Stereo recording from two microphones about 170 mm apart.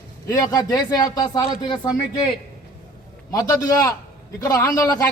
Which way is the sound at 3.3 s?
20° left (ahead or behind).